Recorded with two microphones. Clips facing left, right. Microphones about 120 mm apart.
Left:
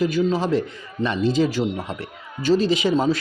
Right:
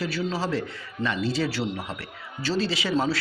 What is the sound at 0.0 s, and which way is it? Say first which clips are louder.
A man's voice: left 7 dB; 15° left (ahead or behind).